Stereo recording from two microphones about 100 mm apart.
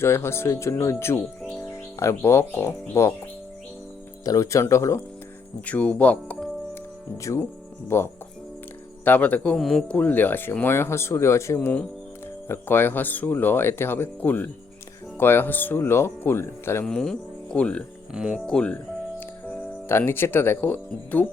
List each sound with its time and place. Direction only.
0.0 s speech: 25° left (ahead or behind)
4.2 s speech: 35° left (ahead or behind)
5.6 s speech: 15° left (ahead or behind)
7.2 s speech: 30° left (ahead or behind); by 9.6 s 15° left (ahead or behind)
9.6 s speech: centre (ahead or behind)
9.9 s speech: 15° left (ahead or behind)
16.8 s speech: 5° left (ahead or behind)
18.1 s speech: 5° right (ahead or behind)
18.4 s speech: 10° left (ahead or behind)
19.5 s speech: 25° left (ahead or behind)